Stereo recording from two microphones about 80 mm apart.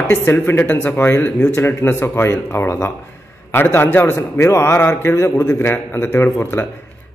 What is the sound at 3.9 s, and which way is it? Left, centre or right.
Speech, left.